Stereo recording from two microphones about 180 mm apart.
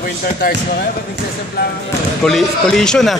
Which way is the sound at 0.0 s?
55° left (ahead or behind).